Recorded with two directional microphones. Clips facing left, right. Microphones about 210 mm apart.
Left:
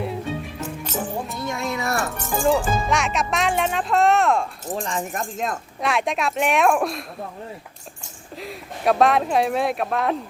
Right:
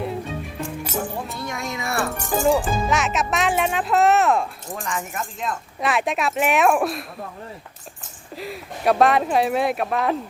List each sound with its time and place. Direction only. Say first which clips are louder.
1.4 s music: left 3 dB; 25° left (ahead or behind)
2.1 s speech: right 2 dB; 10° right (ahead or behind)
4.8 s speech: left 1 dB; 35° left (ahead or behind)
5.8 s speech: right 1 dB; centre (ahead or behind)
8.4 s speech: right 2 dB; centre (ahead or behind)